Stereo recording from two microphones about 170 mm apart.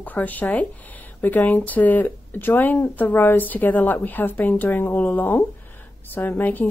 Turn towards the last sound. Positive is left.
turn(degrees=10)  # may be behind; listen again after turning